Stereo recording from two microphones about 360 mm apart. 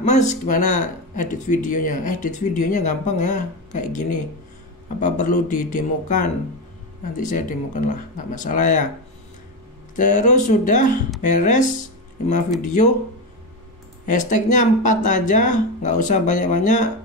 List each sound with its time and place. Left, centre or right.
0.0 s speech: centre
5.0 s speech: left
9.9 s speech: left
14.0 s speech: left